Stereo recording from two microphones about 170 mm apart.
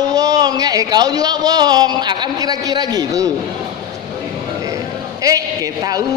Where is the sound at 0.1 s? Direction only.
20° right (ahead or behind).